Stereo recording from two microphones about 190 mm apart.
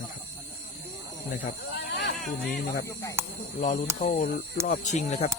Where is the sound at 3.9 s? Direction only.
35° left (ahead or behind).